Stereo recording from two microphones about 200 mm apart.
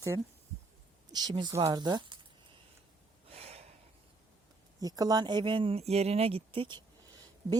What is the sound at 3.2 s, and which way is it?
Gasp, 30° right (ahead or behind).